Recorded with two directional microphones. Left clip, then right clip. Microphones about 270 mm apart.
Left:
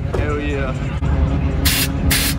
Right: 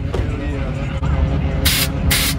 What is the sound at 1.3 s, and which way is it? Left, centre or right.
Spray, centre.